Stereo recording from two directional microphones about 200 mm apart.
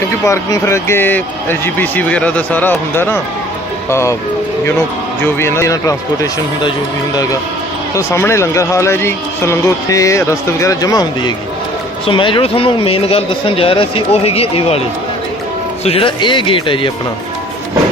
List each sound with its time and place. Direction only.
0.3 s speech: 15° left (ahead or behind)
5.2 s speech: 10° left (ahead or behind)
7.9 s speech: 15° left (ahead or behind); by 14.8 s 30° left (ahead or behind)
15.8 s speech: 30° left (ahead or behind)